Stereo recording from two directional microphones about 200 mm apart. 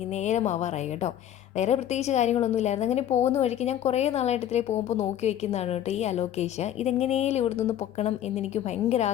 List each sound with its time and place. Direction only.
0.2 s a woman's voice: 35° left (ahead or behind)